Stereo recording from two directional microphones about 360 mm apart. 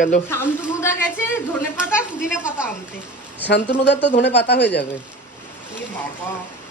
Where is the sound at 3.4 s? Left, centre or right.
Left.